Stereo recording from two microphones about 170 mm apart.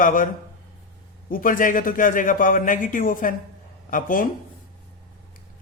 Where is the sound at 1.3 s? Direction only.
55° left (ahead or behind).